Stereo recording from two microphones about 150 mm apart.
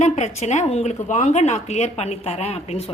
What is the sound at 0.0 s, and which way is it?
A woman's voice, 50° left (ahead or behind).